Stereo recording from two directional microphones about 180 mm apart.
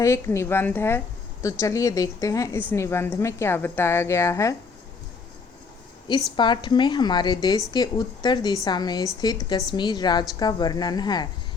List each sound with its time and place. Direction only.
0.0 s a woman's voice: 15° left (ahead or behind)
6.3 s a woman's voice: 25° left (ahead or behind)